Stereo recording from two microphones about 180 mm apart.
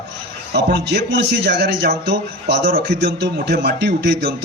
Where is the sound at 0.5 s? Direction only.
65° right (ahead or behind).